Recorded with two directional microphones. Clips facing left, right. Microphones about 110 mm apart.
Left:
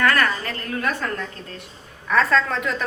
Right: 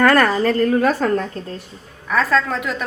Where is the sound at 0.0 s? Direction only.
40° right (ahead or behind).